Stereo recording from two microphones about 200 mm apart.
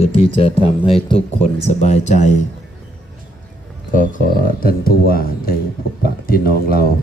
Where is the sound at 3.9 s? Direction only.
40° left (ahead or behind).